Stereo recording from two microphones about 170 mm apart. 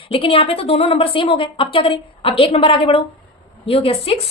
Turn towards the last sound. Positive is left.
turn(degrees=35)  # may be behind; listen again after turning